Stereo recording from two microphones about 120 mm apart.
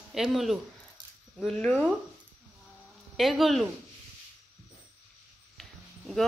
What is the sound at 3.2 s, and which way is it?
Speech, centre (ahead or behind).